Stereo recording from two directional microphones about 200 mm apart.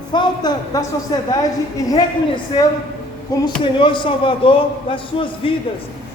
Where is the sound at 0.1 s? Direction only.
20° left (ahead or behind).